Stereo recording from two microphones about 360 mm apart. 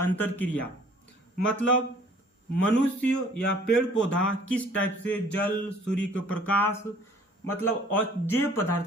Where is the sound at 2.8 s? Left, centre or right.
Centre.